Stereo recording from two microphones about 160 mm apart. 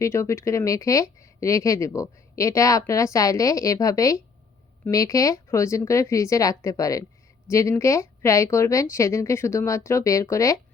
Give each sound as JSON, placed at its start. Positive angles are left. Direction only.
{"t": 0.0, "sound": "speech", "side_deg": 20}